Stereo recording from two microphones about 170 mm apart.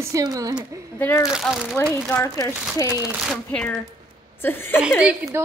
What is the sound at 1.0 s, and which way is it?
Speech, 15° left (ahead or behind).